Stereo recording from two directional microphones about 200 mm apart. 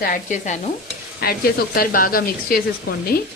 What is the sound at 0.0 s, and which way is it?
Stir, 40° left (ahead or behind).